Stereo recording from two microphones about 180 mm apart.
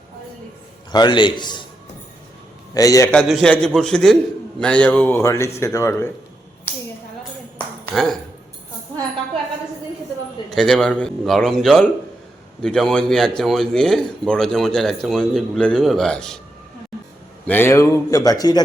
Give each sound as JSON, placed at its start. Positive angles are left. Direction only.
{"t": 0.9, "sound": "a man's voice", "side_deg": 25}
{"t": 2.7, "sound": "a man's voice", "side_deg": 20}
{"t": 3.1, "sound": "a man's voice", "side_deg": 0}
{"t": 7.9, "sound": "a man's voice", "side_deg": 0}
{"t": 10.5, "sound": "a man's voice", "side_deg": 0}
{"t": 17.4, "sound": "speech", "side_deg": 10}